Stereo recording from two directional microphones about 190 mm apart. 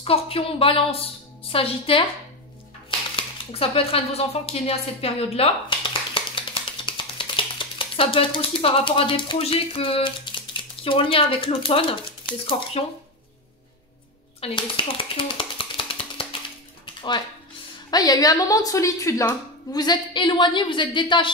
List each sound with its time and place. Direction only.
0.0 s a woman's voice: 30° left (ahead or behind)
3.2 s speech: 30° left (ahead or behind)
14.4 s a sound: 30° left (ahead or behind)
16.8 s music: 25° left (ahead or behind)
17.9 s a woman's voice: 20° left (ahead or behind)